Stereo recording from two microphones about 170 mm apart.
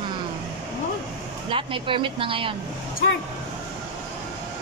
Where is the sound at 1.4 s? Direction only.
30° right (ahead or behind).